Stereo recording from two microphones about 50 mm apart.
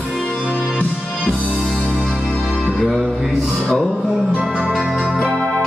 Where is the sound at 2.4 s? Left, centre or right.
Centre.